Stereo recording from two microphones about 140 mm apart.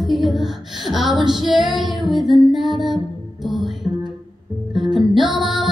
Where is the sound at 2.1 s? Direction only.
Centre (ahead or behind).